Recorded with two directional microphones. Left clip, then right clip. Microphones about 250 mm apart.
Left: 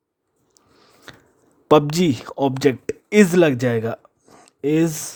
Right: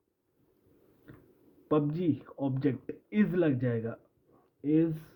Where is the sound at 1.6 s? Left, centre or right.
Left.